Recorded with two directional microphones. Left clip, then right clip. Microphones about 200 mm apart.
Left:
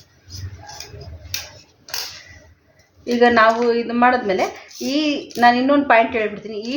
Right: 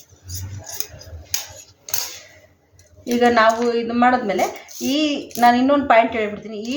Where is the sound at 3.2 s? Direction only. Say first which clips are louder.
Left 2 dB; 35° left (ahead or behind).